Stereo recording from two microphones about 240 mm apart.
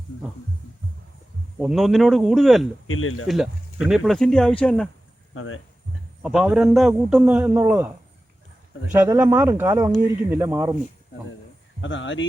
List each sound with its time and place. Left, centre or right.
1.6 s speech: centre
2.8 s speech: left
3.2 s speech: centre
5.3 s speech: left
6.2 s speech: centre
8.9 s speech: centre
11.8 s speech: left